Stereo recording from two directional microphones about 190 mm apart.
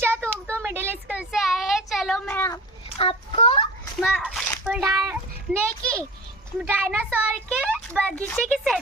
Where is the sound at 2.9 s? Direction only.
30° left (ahead or behind).